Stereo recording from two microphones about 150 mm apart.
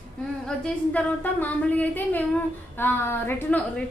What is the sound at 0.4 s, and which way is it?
Speech, 10° left (ahead or behind).